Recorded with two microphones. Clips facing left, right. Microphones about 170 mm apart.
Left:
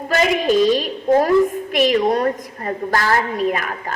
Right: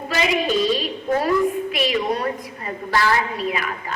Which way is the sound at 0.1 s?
45° left (ahead or behind).